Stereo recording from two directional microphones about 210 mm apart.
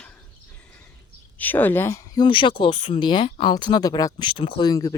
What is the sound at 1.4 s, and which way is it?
Speech, 10° left (ahead or behind).